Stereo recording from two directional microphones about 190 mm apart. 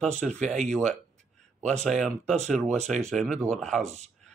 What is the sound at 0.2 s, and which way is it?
Speech, 40° right (ahead or behind).